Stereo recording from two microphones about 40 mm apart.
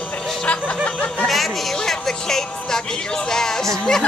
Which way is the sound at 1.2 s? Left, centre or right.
Centre.